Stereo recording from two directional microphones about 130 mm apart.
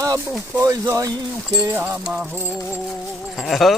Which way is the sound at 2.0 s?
10° right (ahead or behind).